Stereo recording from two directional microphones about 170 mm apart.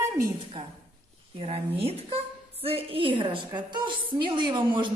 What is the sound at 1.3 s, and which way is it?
A woman's voice, 35° right (ahead or behind).